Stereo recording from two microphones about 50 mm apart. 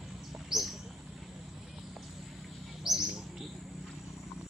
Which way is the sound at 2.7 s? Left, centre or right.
Centre.